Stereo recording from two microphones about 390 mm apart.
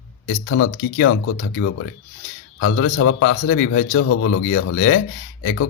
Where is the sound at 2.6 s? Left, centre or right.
Left.